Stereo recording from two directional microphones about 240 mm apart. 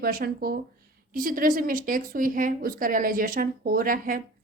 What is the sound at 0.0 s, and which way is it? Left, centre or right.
Speech, right.